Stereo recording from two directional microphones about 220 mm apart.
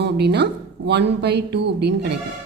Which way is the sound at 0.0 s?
50° right (ahead or behind).